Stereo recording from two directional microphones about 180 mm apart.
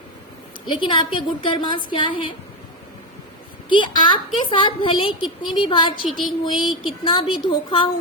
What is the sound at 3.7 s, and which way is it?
A woman's voice, 25° left (ahead or behind).